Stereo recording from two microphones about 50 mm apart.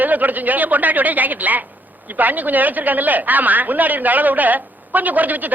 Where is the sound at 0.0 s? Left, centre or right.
Right.